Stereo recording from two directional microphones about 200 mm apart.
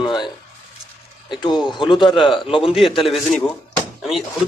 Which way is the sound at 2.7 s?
Centre (ahead or behind).